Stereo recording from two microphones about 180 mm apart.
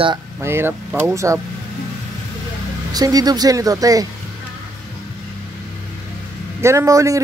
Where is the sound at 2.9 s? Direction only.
20° right (ahead or behind).